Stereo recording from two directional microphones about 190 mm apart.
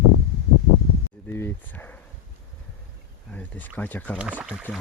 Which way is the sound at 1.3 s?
10° left (ahead or behind).